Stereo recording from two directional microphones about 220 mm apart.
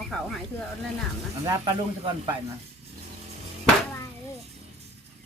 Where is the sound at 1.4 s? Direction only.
20° right (ahead or behind).